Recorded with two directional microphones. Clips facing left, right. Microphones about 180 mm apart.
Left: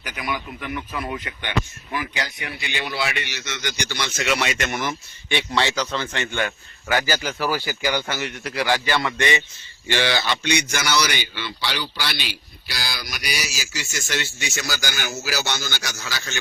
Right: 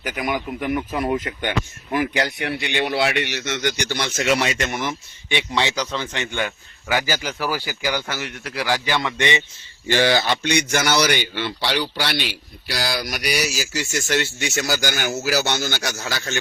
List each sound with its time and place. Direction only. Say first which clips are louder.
0.0 s a man's voice: right 5 dB; 45° right (ahead or behind); by 9.4 s 20° right (ahead or behind)
9.9 s speech: right 4 dB; 40° right (ahead or behind)